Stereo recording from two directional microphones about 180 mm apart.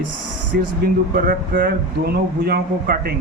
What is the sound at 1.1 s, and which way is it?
A man's voice, 50° right (ahead or behind).